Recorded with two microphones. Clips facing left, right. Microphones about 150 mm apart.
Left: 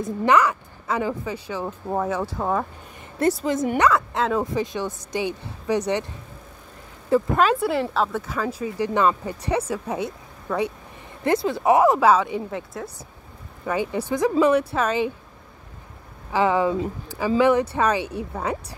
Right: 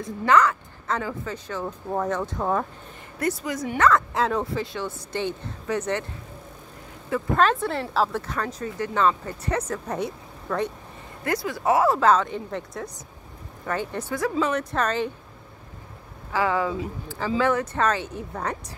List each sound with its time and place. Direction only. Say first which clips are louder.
0.2 s speech: even; 15° left (ahead or behind)
3.2 s speech: left 6 dB; 30° left (ahead or behind)
3.7 s speech: right 1 dB; 15° left (ahead or behind)
4.1 s speech: left 1 dB; centre (ahead or behind)
4.6 s speech: left 4 dB; 15° left (ahead or behind)
7.3 s speech: left 2 dB; 10° left (ahead or behind)
11.2 s speech: left 4 dB; 25° left (ahead or behind); by 15.0 s 10° left (ahead or behind)
16.3 s speech: left 4 dB; 20° left (ahead or behind)